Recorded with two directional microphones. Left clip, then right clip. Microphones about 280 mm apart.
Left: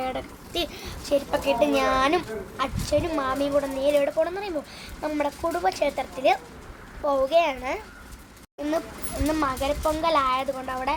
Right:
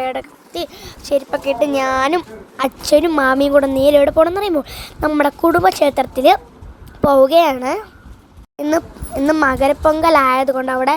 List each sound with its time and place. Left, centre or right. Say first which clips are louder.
0.0 s speech: right 8 dB; right